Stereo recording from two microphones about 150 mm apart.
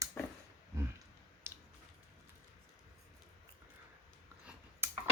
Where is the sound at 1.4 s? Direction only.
15° right (ahead or behind).